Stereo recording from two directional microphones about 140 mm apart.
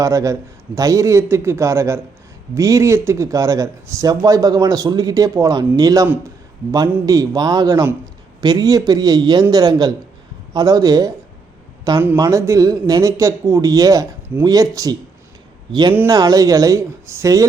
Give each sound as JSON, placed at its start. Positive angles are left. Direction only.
{"t": 0.0, "sound": "a man's voice", "side_deg": -20}